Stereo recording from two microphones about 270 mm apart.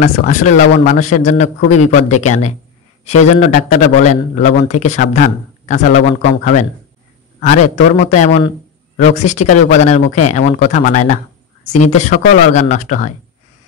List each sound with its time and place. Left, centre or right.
0.0 s a man's voice: left